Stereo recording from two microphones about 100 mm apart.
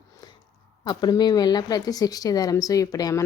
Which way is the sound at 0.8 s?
45° left (ahead or behind).